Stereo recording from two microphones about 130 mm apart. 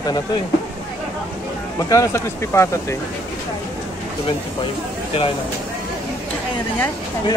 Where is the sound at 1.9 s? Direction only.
20° left (ahead or behind).